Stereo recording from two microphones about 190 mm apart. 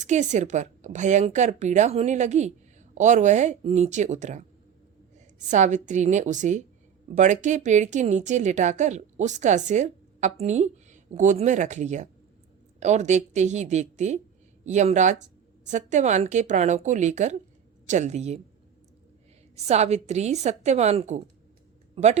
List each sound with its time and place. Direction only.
0.0 s a woman's voice: 40° right (ahead or behind)
19.5 s a woman's voice: 35° right (ahead or behind)